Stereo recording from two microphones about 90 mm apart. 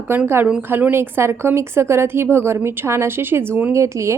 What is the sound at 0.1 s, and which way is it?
A woman's voice, 20° right (ahead or behind).